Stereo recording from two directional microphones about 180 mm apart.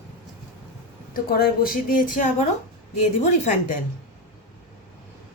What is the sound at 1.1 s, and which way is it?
Speech, 55° left (ahead or behind).